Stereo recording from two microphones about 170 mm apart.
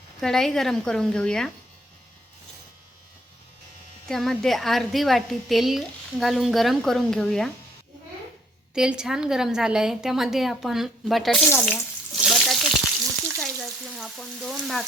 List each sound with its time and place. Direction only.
0.2 s a woman's voice: centre (ahead or behind)
4.1 s a woman's voice: centre (ahead or behind)
8.7 s a woman's voice: 5° right (ahead or behind)
13.4 s frying: centre (ahead or behind)